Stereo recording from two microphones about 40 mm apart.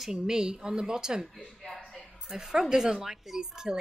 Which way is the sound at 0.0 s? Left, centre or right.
Centre.